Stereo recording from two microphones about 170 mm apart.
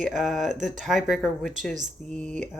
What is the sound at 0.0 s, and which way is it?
Speech, centre (ahead or behind).